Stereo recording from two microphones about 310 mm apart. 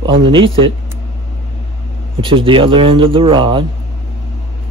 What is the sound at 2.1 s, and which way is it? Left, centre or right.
Speech, centre.